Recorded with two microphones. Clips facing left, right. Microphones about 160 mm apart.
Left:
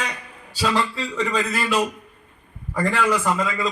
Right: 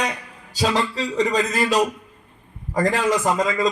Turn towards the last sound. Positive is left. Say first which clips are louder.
# right 2 dB
turn(degrees=-40)  # may be behind; listen again after turning